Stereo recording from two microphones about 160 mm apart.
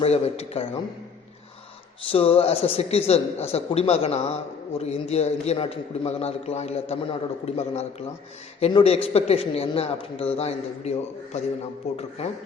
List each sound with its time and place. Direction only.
0.0 s a man's voice: 40° left (ahead or behind)
2.0 s a man's voice: 35° left (ahead or behind)